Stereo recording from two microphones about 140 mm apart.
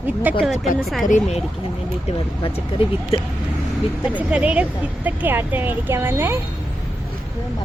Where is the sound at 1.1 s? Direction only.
60° left (ahead or behind).